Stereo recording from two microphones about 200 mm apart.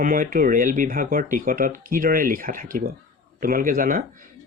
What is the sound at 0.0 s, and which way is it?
Speech, 45° right (ahead or behind).